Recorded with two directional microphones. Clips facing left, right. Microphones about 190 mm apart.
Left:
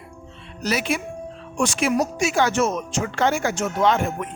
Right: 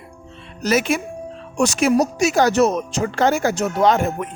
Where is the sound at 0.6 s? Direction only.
45° right (ahead or behind).